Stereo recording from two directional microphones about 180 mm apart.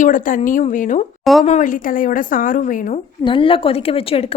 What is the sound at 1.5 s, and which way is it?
A woman's voice, 45° left (ahead or behind).